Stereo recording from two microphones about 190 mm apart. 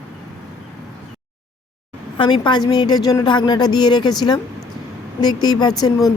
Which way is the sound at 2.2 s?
25° left (ahead or behind).